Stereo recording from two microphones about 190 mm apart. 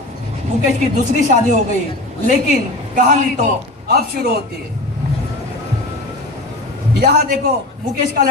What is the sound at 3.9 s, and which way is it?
Speech, 55° right (ahead or behind).